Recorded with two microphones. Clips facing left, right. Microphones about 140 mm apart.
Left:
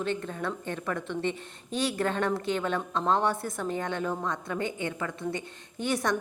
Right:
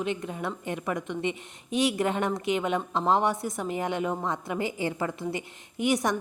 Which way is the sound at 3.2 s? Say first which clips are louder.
Right 1 dB; centre (ahead or behind).